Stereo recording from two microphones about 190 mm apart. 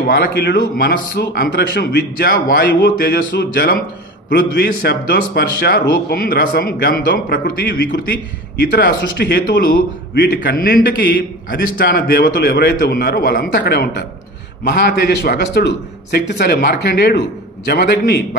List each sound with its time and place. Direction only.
0.0 s a man's voice: 55° left (ahead or behind)